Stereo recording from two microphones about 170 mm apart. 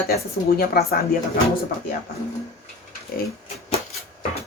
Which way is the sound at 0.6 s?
65° left (ahead or behind).